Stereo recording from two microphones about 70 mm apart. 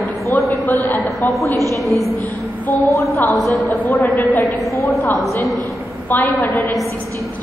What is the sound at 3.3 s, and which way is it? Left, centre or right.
A woman's voice, left.